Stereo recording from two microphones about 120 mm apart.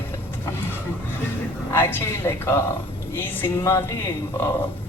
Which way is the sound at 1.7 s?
15° left (ahead or behind).